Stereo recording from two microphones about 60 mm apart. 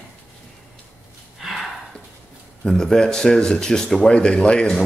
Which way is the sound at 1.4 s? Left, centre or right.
Centre.